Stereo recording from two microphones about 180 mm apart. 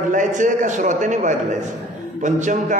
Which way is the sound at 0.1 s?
45° right (ahead or behind).